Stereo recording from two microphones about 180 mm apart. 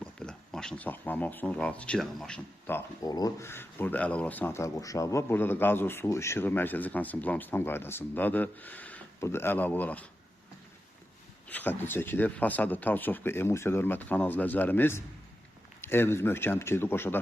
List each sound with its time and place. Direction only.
0.0 s speech: 5° left (ahead or behind)
11.4 s speech: 10° left (ahead or behind)